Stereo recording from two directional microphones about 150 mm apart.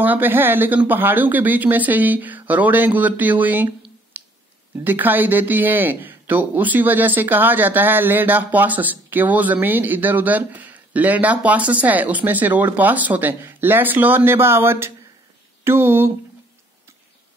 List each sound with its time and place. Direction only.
0.0 s speech: 10° right (ahead or behind)